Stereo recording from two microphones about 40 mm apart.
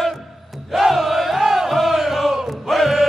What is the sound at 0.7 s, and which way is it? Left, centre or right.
Battle cry, centre.